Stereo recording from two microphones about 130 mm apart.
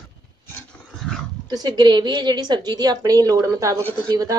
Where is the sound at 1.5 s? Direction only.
30° right (ahead or behind).